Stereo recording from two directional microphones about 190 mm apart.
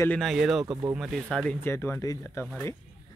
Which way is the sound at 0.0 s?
5° left (ahead or behind).